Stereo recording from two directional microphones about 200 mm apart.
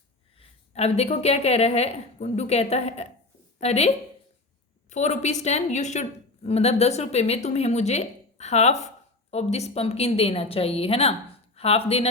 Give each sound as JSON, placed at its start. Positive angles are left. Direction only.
{"t": 0.3, "sound": "a woman's voice", "side_deg": 30}